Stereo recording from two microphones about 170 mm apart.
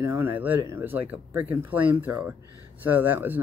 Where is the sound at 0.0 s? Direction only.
15° right (ahead or behind).